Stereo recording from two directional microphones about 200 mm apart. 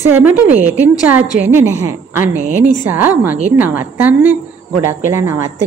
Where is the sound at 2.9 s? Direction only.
10° right (ahead or behind).